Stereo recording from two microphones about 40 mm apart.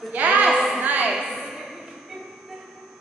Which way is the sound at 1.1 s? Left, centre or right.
Centre.